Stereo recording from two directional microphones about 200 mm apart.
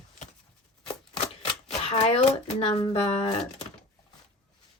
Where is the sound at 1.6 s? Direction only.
30° left (ahead or behind).